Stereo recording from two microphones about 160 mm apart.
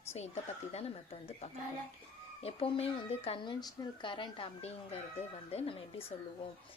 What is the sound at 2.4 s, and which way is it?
Speech, 40° left (ahead or behind).